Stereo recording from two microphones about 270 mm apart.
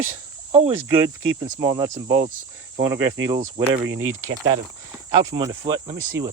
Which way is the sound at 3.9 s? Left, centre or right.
Right.